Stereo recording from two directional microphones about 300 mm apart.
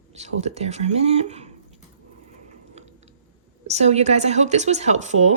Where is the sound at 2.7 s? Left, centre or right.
Right.